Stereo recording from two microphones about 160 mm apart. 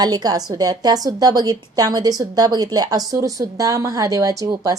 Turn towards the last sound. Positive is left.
turn(degrees=-20)  # may be behind; listen again after turning